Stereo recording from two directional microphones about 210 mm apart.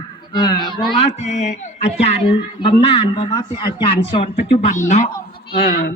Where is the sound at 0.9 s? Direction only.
30° left (ahead or behind).